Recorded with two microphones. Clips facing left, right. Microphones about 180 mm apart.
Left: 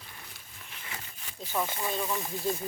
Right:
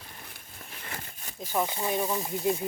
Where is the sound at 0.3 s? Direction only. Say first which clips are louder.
Right 4 dB; 50° right (ahead or behind).